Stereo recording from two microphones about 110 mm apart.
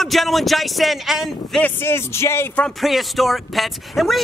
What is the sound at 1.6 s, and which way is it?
Speech, 20° left (ahead or behind).